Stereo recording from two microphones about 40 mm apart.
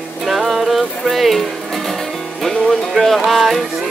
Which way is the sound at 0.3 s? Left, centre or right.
Centre.